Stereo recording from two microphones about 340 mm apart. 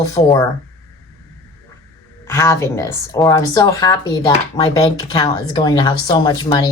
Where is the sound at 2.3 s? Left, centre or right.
Centre.